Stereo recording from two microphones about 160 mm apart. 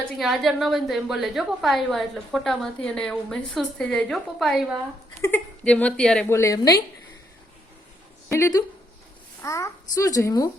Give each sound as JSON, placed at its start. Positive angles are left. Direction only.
{"t": 0.2, "sound": "a woman's voice", "side_deg": 0}
{"t": 6.2, "sound": "a woman's voice", "side_deg": 20}
{"t": 8.3, "sound": "a woman's voice", "side_deg": 20}